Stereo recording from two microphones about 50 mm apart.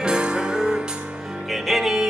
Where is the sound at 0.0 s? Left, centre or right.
Centre.